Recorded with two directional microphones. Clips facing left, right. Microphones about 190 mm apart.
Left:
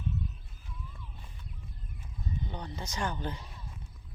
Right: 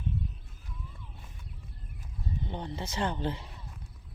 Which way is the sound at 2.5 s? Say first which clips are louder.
Right 3 dB; 25° right (ahead or behind).